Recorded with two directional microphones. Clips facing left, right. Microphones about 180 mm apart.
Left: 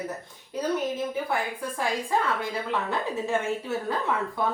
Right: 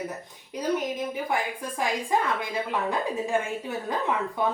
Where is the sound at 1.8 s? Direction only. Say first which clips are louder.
Right 1 dB; 15° right (ahead or behind).